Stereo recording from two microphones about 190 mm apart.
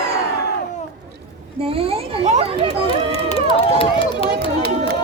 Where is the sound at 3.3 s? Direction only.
30° left (ahead or behind).